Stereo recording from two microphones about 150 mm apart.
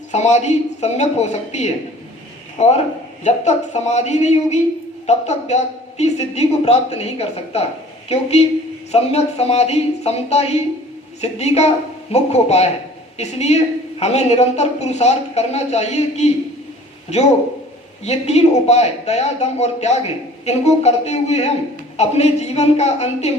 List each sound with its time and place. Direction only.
0.1 s speech: 50° left (ahead or behind)
18.0 s speech: 45° left (ahead or behind)